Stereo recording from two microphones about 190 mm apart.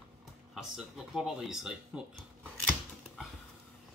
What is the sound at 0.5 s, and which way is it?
Speech, centre (ahead or behind).